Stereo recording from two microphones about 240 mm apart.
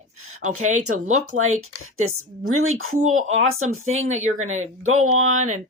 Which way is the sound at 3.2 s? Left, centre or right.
Right.